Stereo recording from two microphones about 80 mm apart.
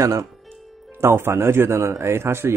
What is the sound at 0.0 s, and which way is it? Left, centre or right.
Speech, right.